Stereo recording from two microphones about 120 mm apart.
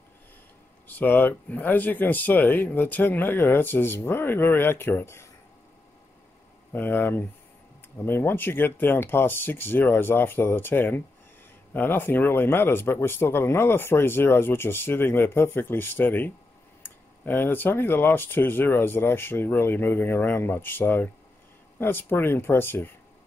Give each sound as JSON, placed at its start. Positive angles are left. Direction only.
{"t": 0.8, "sound": "speech", "side_deg": 15}
{"t": 6.7, "sound": "speech", "side_deg": 15}